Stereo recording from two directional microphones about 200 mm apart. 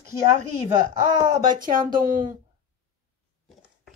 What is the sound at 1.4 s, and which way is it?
Speech, 45° right (ahead or behind).